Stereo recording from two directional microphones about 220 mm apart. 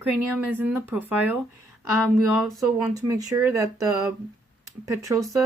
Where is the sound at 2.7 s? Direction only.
15° right (ahead or behind).